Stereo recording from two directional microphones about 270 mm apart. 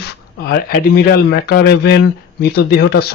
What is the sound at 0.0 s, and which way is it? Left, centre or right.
Speech, left.